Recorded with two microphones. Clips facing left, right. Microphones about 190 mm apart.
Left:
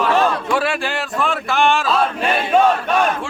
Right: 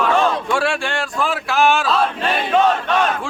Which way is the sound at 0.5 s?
5° left (ahead or behind).